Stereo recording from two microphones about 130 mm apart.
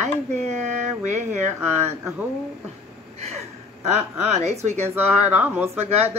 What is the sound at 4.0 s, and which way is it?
Speech, 55° right (ahead or behind).